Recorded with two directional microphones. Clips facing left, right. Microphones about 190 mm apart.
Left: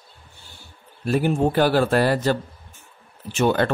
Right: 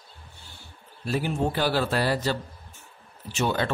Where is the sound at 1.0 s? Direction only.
50° left (ahead or behind).